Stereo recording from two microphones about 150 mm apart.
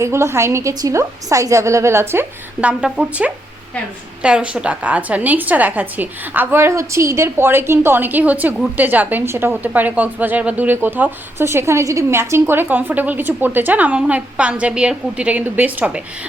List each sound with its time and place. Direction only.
0.0 s a woman's voice: 20° right (ahead or behind)